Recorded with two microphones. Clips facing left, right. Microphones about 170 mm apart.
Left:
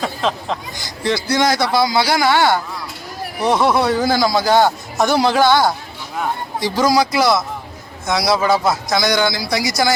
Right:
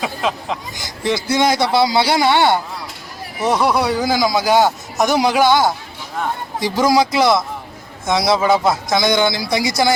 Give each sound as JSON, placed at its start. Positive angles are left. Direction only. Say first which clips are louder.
{"t": 0.0, "sound": "a man's voice", "louder": "left 1 dB", "side_deg": -10}
{"t": 3.4, "sound": "speech", "louder": "left 1 dB", "side_deg": 0}
{"t": 3.8, "sound": "a man's voice", "louder": "left 1 dB", "side_deg": -15}
{"t": 8.4, "sound": "speech", "louder": "right 1 dB", "side_deg": 0}
{"t": 8.9, "sound": "a man's voice", "louder": "right 1 dB", "side_deg": -20}